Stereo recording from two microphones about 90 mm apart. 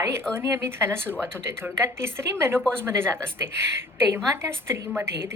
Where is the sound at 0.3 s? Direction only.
30° right (ahead or behind).